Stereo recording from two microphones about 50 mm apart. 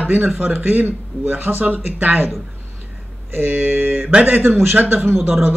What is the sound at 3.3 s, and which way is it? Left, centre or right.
Speech, right.